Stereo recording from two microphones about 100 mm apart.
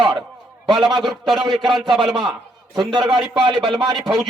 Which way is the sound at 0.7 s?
Centre (ahead or behind).